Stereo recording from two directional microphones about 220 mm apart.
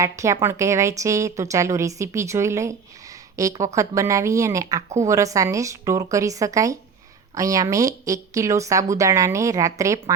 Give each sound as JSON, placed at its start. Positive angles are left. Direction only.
{"t": 0.0, "sound": "speech", "side_deg": -15}